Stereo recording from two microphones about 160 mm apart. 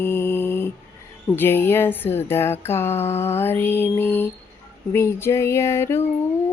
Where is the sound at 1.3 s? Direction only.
15° left (ahead or behind).